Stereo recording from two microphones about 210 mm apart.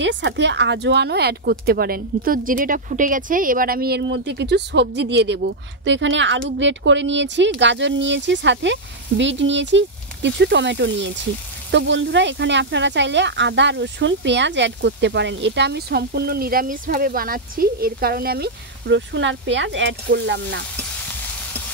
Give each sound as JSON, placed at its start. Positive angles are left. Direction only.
{"t": 0.0, "sound": "speech", "side_deg": -60}